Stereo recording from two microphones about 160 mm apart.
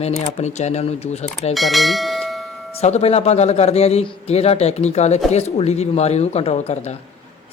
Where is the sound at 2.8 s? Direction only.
40° left (ahead or behind).